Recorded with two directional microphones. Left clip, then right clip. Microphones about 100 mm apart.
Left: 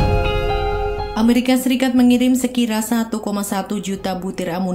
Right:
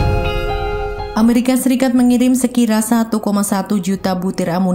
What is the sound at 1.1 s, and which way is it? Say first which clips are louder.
Speech: right 2 dB; 40° right (ahead or behind).